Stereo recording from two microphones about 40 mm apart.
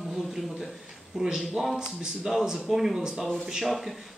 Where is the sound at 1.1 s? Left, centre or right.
Centre.